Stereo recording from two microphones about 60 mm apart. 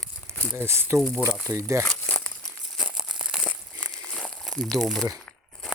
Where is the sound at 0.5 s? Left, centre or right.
Right.